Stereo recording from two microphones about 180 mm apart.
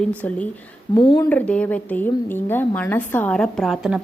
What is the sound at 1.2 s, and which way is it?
A woman's voice, 5° left (ahead or behind).